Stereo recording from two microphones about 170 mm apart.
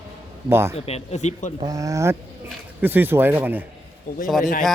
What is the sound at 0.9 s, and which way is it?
Speech, 40° left (ahead or behind).